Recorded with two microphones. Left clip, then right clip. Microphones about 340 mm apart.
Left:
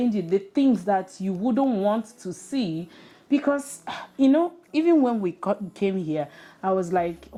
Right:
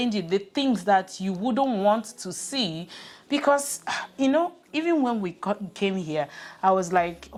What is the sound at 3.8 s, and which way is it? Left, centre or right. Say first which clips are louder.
A woman's voice: left 3 dB; right.